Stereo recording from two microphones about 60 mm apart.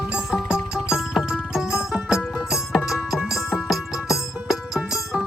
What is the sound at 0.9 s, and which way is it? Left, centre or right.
Music, centre.